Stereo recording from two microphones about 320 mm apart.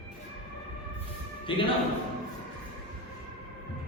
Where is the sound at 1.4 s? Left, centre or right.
Centre.